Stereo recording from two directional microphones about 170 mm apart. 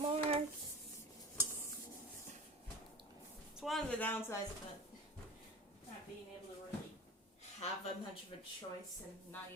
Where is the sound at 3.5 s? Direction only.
Centre (ahead or behind).